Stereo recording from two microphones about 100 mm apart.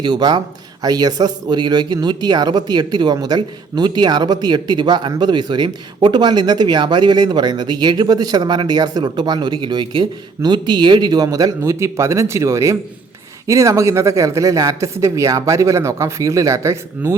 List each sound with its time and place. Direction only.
0.0 s speech: 45° right (ahead or behind)